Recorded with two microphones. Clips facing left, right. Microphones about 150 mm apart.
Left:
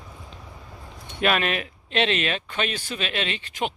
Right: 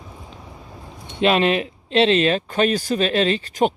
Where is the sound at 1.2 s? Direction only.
25° right (ahead or behind).